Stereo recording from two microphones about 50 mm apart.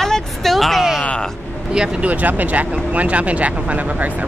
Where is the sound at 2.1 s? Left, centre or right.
Right.